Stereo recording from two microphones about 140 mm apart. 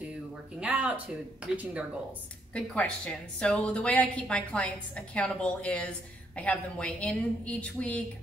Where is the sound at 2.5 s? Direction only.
5° left (ahead or behind).